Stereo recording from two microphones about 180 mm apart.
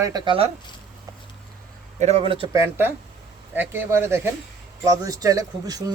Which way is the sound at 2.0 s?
35° right (ahead or behind).